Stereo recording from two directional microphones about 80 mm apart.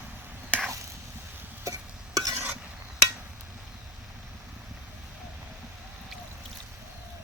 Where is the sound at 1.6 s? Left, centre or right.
Right.